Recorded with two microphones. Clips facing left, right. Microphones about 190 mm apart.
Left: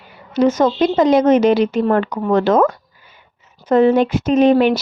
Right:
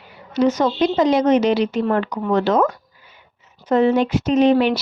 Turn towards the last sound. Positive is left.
turn(degrees=50)  # may be behind; listen again after turning